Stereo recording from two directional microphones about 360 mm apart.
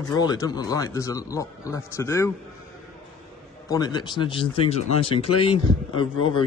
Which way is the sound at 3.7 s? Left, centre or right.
Centre.